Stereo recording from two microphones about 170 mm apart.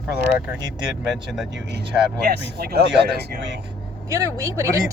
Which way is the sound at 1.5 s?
80° right.